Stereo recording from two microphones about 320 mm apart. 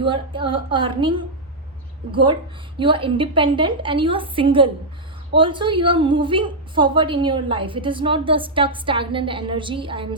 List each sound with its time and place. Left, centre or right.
0.0 s a woman's voice: centre